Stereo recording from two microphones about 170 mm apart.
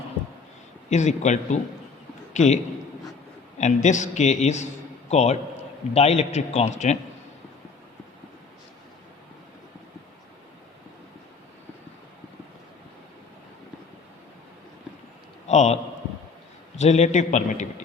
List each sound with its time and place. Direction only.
0.9 s a man's voice: 45° left (ahead or behind)
3.6 s a man's voice: 45° left (ahead or behind)
15.4 s a sound: 40° left (ahead or behind)
16.7 s a man's voice: 40° left (ahead or behind)